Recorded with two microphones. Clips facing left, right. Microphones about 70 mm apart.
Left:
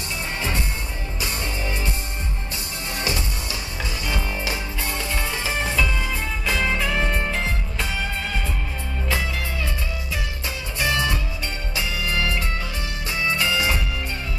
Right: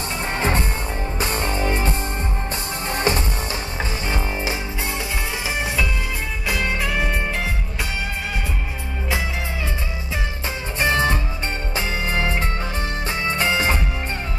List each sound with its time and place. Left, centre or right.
0.4 s music: right
6.4 s music: centre
10.8 s music: right